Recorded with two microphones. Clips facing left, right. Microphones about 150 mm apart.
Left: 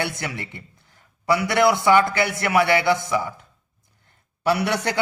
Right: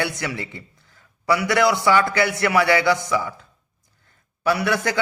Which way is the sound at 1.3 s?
20° left (ahead or behind).